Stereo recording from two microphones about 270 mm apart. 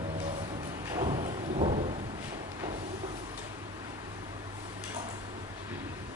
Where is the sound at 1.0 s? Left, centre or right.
Right.